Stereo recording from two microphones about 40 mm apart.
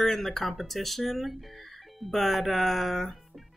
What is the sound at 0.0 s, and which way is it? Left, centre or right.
A woman's voice, centre.